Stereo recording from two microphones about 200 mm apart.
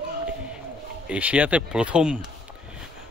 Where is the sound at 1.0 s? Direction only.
5° right (ahead or behind).